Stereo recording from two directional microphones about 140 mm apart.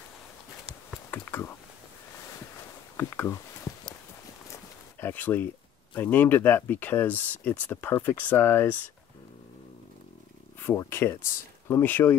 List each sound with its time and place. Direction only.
1.1 s a sound: 15° left (ahead or behind)
3.0 s speech: 15° left (ahead or behind)
5.0 s speech: 15° left (ahead or behind)
10.6 s speech: 15° left (ahead or behind)